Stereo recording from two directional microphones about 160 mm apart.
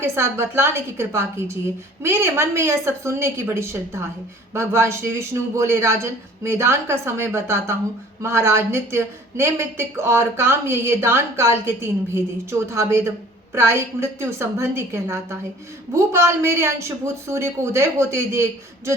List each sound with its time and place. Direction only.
0.0 s speech: 15° right (ahead or behind)